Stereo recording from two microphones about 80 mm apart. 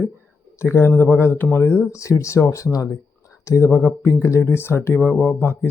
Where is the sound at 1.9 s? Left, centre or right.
Left.